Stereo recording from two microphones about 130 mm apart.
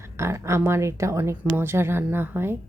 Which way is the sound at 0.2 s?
20° right (ahead or behind).